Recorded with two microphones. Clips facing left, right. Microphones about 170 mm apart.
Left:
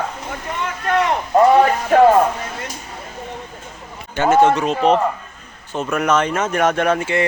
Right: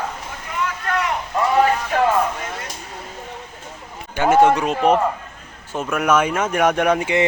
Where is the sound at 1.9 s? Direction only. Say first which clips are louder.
Left 10 dB; 50° left (ahead or behind).